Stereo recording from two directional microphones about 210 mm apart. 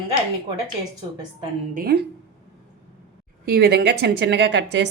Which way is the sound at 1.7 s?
45° right (ahead or behind).